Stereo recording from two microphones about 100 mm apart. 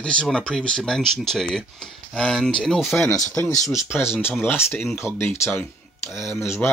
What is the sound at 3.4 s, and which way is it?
Speech, 20° left (ahead or behind).